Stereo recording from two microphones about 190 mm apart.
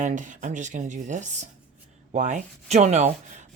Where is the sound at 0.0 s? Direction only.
40° right (ahead or behind).